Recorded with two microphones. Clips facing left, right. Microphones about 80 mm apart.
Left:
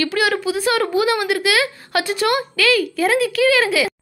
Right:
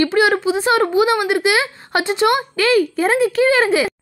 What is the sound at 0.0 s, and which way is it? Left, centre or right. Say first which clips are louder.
A woman's voice: right 4 dB; right.